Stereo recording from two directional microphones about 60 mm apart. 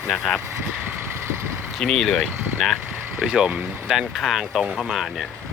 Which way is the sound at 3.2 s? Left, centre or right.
Centre.